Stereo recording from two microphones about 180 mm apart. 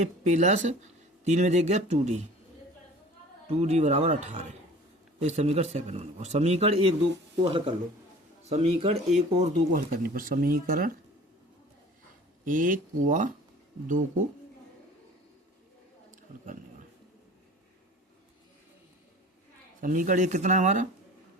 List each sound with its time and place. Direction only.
0.0 s speech: 40° right (ahead or behind)
3.5 s speech: 35° right (ahead or behind)
10.0 s speech: 55° right (ahead or behind)
12.5 s speech: 45° right (ahead or behind)
19.8 s speech: 45° right (ahead or behind)